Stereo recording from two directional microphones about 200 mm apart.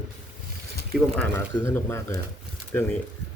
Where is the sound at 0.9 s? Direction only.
5° left (ahead or behind).